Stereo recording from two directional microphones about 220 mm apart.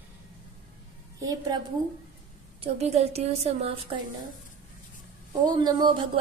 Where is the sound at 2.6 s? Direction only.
30° right (ahead or behind).